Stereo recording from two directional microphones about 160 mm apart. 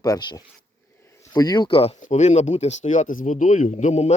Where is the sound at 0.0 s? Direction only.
25° left (ahead or behind).